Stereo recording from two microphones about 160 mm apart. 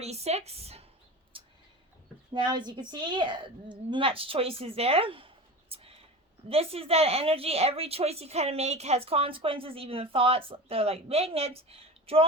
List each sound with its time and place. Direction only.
0.0 s a woman's voice: 40° right (ahead or behind)
1.3 s a sound: 35° right (ahead or behind)
2.3 s a woman's voice: 25° right (ahead or behind)